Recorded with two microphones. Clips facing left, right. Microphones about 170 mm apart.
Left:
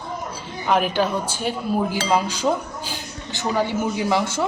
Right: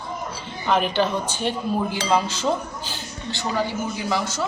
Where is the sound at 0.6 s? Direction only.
10° left (ahead or behind).